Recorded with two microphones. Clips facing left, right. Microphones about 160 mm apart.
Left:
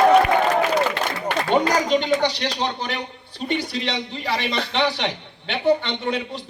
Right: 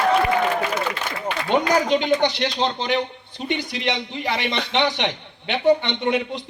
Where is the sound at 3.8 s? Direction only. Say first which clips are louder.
Right 2 dB; 20° right (ahead or behind).